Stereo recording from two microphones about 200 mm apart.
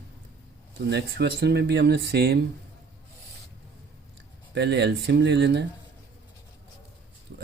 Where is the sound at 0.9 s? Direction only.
55° right (ahead or behind).